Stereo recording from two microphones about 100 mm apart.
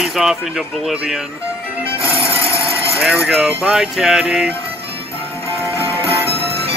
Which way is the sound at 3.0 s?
Centre (ahead or behind).